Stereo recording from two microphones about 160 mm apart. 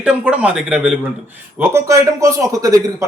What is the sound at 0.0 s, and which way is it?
Speech, 5° right (ahead or behind).